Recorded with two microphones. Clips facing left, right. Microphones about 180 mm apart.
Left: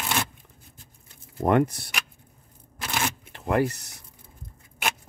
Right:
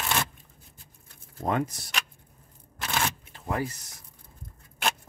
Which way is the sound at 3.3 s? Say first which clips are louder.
Left 7 dB; 70° left (ahead or behind).